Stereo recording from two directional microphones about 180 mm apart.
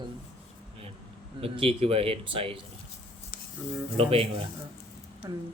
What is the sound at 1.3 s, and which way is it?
A man's voice, 30° right (ahead or behind).